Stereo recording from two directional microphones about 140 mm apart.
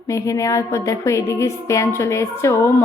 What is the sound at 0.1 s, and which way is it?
A woman's voice, 20° left (ahead or behind).